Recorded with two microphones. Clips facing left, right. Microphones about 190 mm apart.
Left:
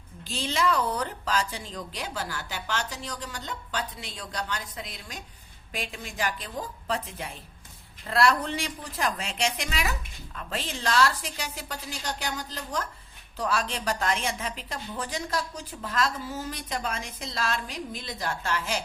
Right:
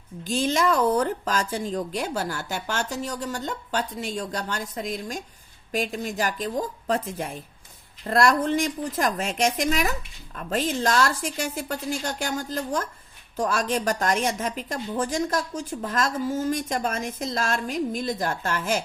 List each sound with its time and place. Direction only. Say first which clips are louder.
0.3 s a woman's voice: right 5 dB; 45° right (ahead or behind)